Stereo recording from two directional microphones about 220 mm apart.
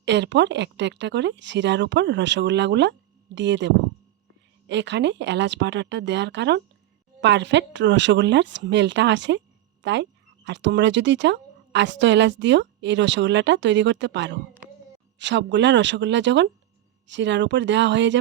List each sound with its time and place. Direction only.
0.0 s speech: 55° right (ahead or behind)